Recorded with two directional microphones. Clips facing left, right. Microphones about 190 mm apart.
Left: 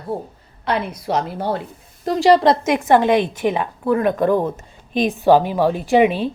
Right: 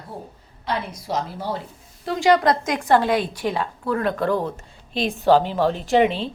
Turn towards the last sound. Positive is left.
turn(degrees=10)  # may be behind; listen again after turning